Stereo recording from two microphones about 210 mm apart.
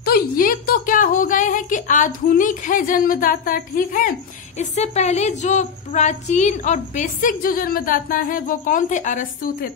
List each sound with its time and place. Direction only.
0.0 s a woman's voice: 45° left (ahead or behind)